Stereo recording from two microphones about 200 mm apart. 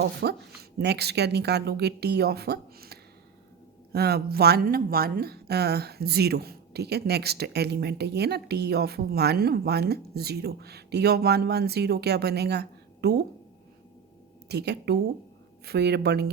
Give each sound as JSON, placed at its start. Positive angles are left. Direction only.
{"t": 0.2, "sound": "speech", "side_deg": -55}
{"t": 14.4, "sound": "speech", "side_deg": -55}